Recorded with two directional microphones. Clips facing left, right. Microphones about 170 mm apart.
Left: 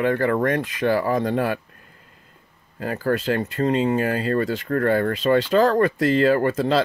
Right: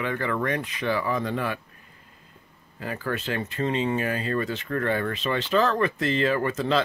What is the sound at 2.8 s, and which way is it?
Speech, 45° left (ahead or behind).